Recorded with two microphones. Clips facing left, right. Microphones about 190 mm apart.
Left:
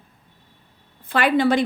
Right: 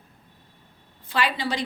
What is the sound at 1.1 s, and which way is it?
Speech, 55° left (ahead or behind).